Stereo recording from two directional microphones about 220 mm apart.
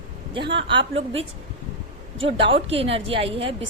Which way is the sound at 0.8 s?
25° right (ahead or behind).